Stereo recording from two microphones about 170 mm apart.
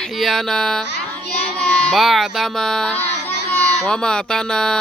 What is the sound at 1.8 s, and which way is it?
Speech, centre (ahead or behind).